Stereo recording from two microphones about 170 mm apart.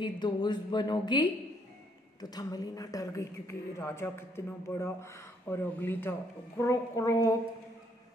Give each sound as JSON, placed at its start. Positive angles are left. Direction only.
{"t": 0.0, "sound": "a woman's voice", "side_deg": 25}